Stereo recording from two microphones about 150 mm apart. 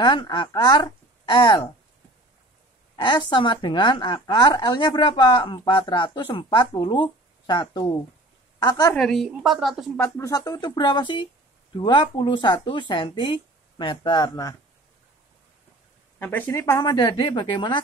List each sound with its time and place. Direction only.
0.0 s a woman's voice: 30° left (ahead or behind)
3.0 s a woman's voice: 30° left (ahead or behind)
8.9 s a woman's voice: 5° left (ahead or behind)
10.0 s a woman's voice: 20° left (ahead or behind)
16.2 s speech: 15° left (ahead or behind)
16.8 s a woman's voice: 30° left (ahead or behind)